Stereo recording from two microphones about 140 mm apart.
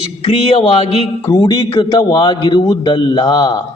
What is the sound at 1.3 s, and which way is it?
A man's voice, 30° left (ahead or behind).